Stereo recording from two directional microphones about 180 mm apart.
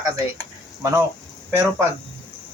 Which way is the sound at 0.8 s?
15° right (ahead or behind).